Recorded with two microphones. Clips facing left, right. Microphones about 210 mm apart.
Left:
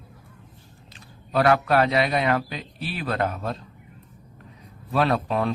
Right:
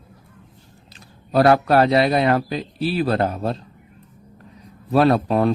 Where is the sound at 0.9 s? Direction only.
35° right (ahead or behind).